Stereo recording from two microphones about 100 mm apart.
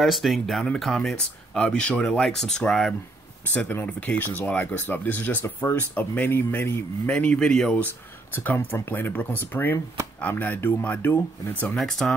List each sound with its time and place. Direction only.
0.0 s speech: centre (ahead or behind)
3.5 s speech: 15° left (ahead or behind)
7.1 s speech: 10° left (ahead or behind)
7.8 s speech: 20° left (ahead or behind)
11.8 s speech: 5° left (ahead or behind)